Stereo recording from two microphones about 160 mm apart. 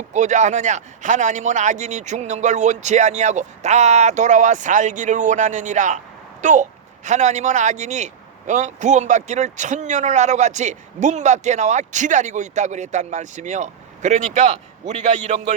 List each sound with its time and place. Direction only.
0.1 s speech: 45° right (ahead or behind)